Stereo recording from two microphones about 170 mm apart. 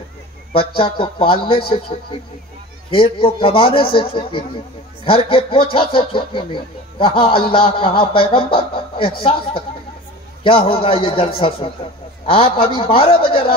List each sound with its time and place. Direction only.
0.6 s speech: 30° left (ahead or behind)
2.9 s speech: 30° left (ahead or behind)